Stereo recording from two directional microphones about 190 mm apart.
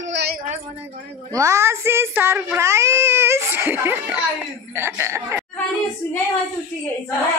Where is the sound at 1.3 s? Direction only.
15° right (ahead or behind).